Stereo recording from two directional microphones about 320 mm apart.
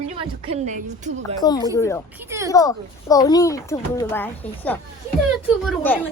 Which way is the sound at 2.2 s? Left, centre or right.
Centre.